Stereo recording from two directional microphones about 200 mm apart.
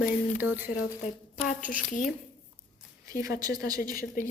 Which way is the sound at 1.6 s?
40° left (ahead or behind).